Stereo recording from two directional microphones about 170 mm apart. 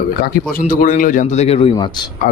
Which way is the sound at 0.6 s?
50° left (ahead or behind).